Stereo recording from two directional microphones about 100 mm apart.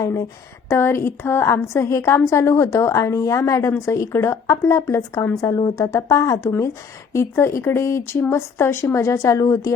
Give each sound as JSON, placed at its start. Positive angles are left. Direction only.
{"t": 0.0, "sound": "a woman's voice", "side_deg": 30}